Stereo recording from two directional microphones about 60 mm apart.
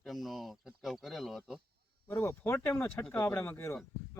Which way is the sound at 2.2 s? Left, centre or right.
Left.